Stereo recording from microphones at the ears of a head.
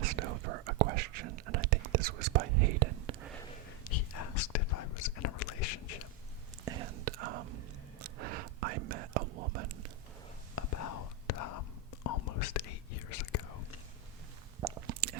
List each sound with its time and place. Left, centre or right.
0.0 s whispering: right
3.8 s whispering: left
6.7 s whispering: right
10.5 s whispering: left
14.6 s a sound: right